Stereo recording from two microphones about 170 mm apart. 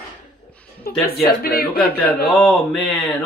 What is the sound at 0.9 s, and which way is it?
Speech, 60° left (ahead or behind).